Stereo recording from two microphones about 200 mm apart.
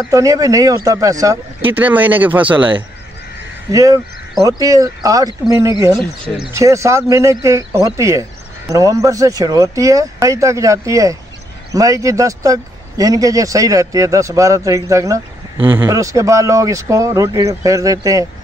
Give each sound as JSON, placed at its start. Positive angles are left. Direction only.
{"t": 0.1, "sound": "speech", "side_deg": -15}